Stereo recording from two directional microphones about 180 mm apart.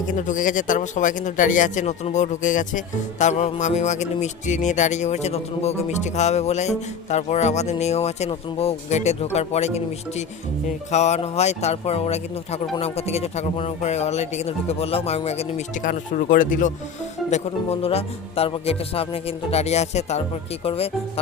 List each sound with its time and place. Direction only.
0.1 s speech: 45° left (ahead or behind)
17.3 s speech: 35° left (ahead or behind)